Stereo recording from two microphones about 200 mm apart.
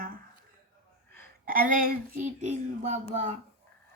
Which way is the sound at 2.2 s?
35° right (ahead or behind).